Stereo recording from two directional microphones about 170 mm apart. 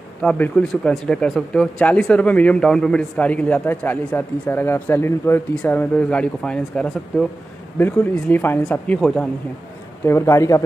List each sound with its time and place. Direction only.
0.2 s speech: 5° left (ahead or behind)
10.0 s speech: 15° left (ahead or behind)